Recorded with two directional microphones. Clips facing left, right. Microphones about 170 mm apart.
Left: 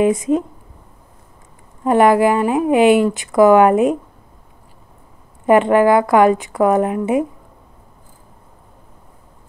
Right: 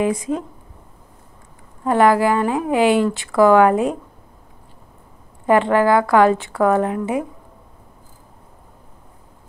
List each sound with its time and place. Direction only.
0.0 s speech: 20° left (ahead or behind)
1.9 s speech: 20° left (ahead or behind)
5.5 s speech: 20° left (ahead or behind)